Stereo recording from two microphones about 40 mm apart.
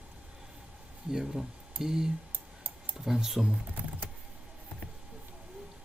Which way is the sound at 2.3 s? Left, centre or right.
Right.